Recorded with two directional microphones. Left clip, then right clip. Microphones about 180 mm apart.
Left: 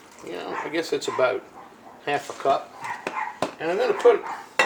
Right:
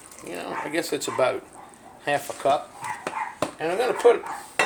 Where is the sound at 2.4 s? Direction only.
45° right (ahead or behind).